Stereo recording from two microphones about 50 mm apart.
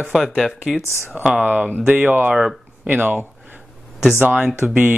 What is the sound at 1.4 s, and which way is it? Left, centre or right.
Speech, right.